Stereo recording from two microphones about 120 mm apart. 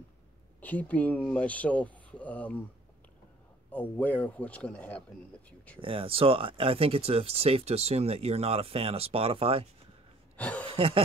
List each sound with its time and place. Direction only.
0.6 s speech: 15° left (ahead or behind)
3.7 s speech: 15° left (ahead or behind)
5.8 s speech: 50° right (ahead or behind)
10.3 s a sound: 10° left (ahead or behind)
10.7 s snicker: 50° right (ahead or behind)